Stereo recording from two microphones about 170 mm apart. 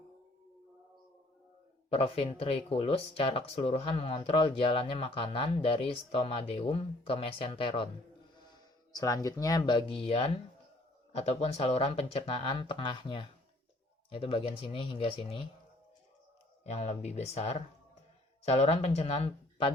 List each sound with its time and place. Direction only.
1.9 s speech: 35° left (ahead or behind)
8.4 s music: 25° left (ahead or behind)
10.0 s speech: 35° left (ahead or behind)
16.6 s speech: 40° left (ahead or behind)